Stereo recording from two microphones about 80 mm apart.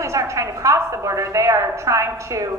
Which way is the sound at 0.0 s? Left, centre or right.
Right.